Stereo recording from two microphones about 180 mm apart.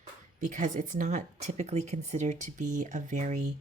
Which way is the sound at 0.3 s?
45° right (ahead or behind).